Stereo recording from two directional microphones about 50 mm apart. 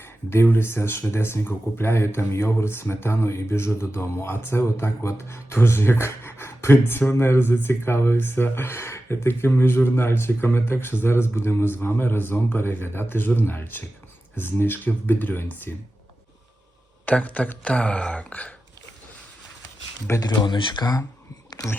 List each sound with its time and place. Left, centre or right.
0.0 s a sound: left
0.4 s speech: left
17.1 s speech: left
20.1 s speech: left